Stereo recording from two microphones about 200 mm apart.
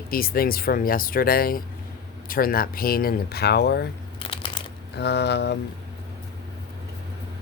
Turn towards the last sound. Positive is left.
turn(degrees=60)  # may be behind; listen again after turning